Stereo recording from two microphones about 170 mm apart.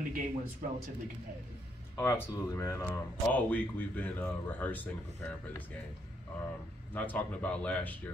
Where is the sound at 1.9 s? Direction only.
15° left (ahead or behind).